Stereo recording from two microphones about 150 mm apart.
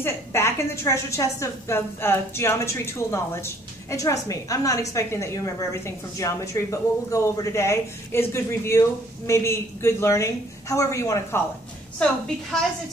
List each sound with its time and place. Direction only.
0.0 s a woman's voice: 15° left (ahead or behind)